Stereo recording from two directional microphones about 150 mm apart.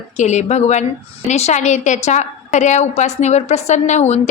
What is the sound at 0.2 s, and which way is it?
A woman's voice, 50° left (ahead or behind).